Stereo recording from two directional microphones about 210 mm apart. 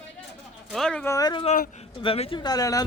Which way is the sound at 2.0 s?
25° left (ahead or behind).